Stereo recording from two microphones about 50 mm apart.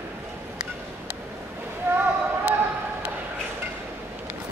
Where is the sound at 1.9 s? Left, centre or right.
Right.